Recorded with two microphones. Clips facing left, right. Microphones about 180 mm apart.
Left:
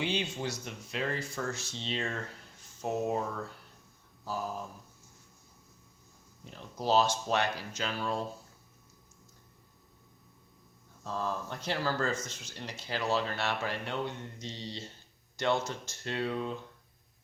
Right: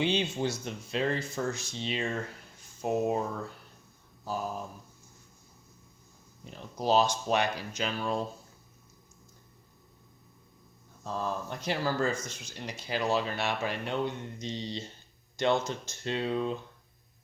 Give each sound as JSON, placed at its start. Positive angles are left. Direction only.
{"t": 0.0, "sound": "speech", "side_deg": -25}
{"t": 6.4, "sound": "speech", "side_deg": -15}
{"t": 11.0, "sound": "speech", "side_deg": -15}